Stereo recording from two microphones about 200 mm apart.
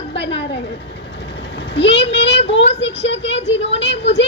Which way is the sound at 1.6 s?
60° left (ahead or behind).